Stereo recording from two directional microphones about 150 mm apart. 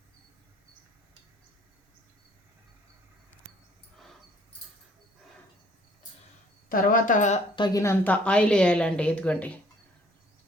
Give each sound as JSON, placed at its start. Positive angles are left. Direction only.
{"t": 6.7, "sound": "speech", "side_deg": 70}
{"t": 7.5, "sound": "a woman's voice", "side_deg": 25}